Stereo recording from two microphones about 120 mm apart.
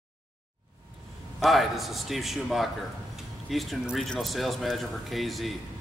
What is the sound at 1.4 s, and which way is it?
A man's voice, centre (ahead or behind).